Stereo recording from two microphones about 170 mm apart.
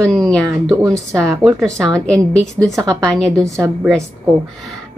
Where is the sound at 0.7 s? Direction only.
20° right (ahead or behind).